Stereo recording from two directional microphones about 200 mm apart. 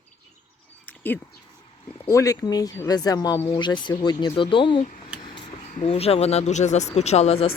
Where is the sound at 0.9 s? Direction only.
10° left (ahead or behind).